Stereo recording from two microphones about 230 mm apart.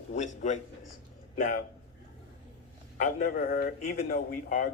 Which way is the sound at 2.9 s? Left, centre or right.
Left.